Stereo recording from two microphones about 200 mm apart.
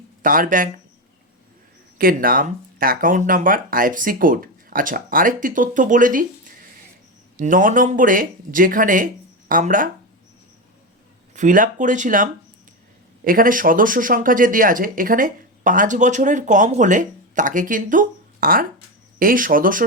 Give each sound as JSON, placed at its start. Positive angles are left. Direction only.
{"t": 0.2, "sound": "speech", "side_deg": -45}
{"t": 2.0, "sound": "speech", "side_deg": -45}
{"t": 7.3, "sound": "speech", "side_deg": -40}
{"t": 11.3, "sound": "speech", "side_deg": -40}